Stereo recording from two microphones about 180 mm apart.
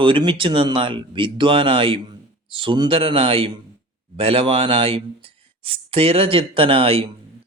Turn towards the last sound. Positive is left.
turn(degrees=-30)  # may be behind; listen again after turning